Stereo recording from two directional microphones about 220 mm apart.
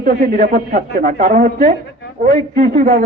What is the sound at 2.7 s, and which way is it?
Speech, 35° right (ahead or behind).